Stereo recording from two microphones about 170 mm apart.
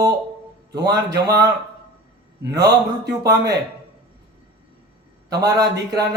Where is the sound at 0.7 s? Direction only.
25° right (ahead or behind).